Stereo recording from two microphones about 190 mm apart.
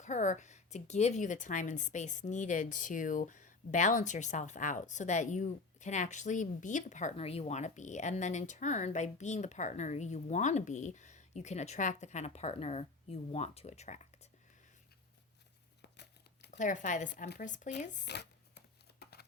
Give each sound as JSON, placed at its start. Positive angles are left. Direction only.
{"t": 0.0, "sound": "a woman's voice", "side_deg": 40}
{"t": 15.8, "sound": "tearing", "side_deg": 60}
{"t": 16.5, "sound": "a woman's voice", "side_deg": 40}
{"t": 18.0, "sound": "a sound", "side_deg": 65}